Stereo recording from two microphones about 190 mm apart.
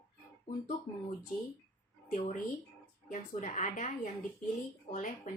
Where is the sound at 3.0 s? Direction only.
40° left (ahead or behind).